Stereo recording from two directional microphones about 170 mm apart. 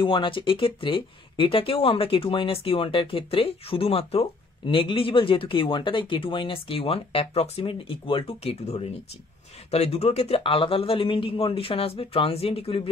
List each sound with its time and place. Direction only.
0.0 s speech: 30° left (ahead or behind)